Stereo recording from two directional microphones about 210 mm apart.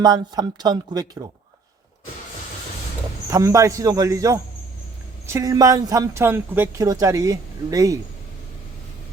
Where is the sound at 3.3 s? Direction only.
15° right (ahead or behind).